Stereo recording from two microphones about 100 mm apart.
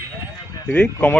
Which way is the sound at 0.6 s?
10° left (ahead or behind).